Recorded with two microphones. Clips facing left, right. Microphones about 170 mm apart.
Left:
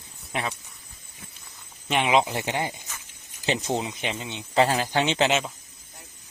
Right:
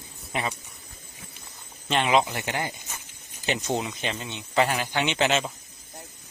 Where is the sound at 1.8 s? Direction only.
10° left (ahead or behind).